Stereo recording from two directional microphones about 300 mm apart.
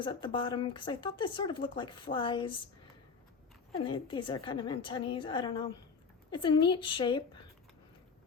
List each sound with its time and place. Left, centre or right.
0.0 s speech: centre
3.8 s speech: centre